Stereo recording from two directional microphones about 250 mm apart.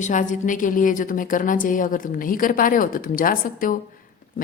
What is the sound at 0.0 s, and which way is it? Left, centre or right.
A woman's voice, left.